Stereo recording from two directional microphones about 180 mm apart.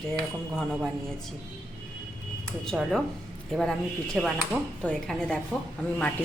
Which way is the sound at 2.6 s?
Centre (ahead or behind).